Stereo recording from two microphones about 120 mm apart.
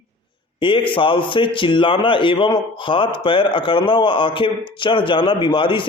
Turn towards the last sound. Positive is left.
turn(degrees=45)  # may be behind; listen again after turning